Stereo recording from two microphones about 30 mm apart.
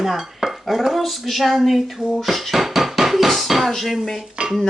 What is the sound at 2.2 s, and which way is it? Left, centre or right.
Speech, centre.